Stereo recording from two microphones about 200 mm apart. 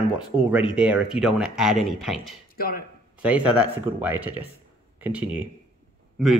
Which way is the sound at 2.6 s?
50° left (ahead or behind).